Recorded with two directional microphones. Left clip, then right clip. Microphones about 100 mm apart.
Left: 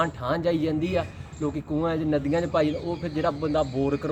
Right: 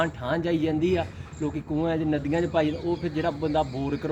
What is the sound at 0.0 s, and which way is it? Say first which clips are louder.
Speech: left 2 dB; 30° left (ahead or behind).